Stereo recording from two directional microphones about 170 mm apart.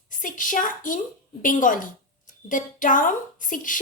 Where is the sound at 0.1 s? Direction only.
50° left (ahead or behind).